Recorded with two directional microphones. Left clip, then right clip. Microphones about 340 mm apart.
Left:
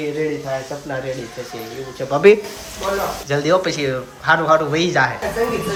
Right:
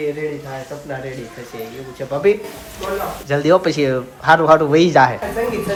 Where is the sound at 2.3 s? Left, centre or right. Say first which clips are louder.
Left 5 dB; left.